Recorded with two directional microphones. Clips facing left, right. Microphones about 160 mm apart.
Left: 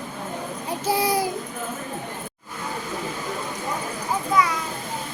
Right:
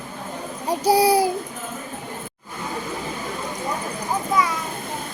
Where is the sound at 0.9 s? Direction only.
35° right (ahead or behind).